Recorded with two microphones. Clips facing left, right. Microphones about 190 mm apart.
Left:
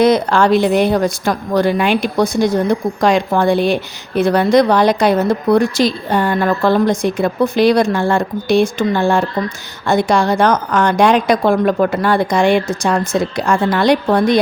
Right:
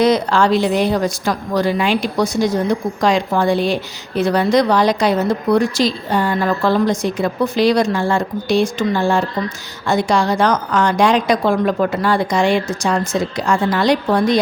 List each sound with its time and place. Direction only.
0.0 s speech: 55° left (ahead or behind)